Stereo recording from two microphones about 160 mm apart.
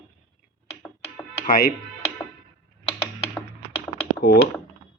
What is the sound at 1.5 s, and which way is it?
Speech, 65° left (ahead or behind).